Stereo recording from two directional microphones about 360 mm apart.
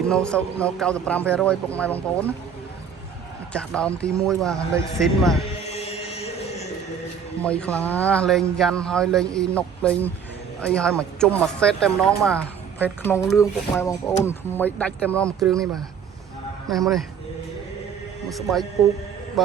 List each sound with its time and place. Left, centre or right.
0.1 s a woman's voice: centre
3.5 s a woman's voice: centre
5.5 s music: centre
7.4 s a woman's voice: centre
18.3 s a woman's voice: centre